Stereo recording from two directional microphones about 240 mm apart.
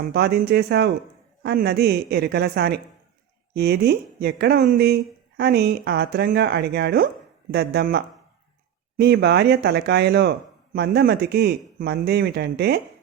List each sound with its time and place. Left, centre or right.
0.1 s speech: right